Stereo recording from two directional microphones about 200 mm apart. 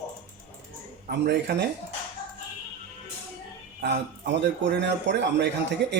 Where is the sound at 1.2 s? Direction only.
55° right (ahead or behind).